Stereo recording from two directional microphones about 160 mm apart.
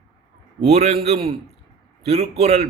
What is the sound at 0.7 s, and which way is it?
A man's voice, 40° right (ahead or behind).